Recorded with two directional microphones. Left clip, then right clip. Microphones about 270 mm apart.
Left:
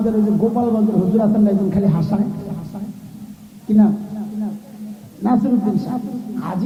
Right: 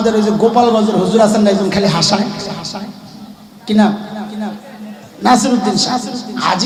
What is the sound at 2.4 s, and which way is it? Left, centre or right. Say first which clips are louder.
Speech: right 9 dB; centre.